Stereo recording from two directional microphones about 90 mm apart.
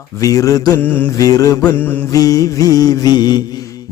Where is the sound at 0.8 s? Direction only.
20° left (ahead or behind).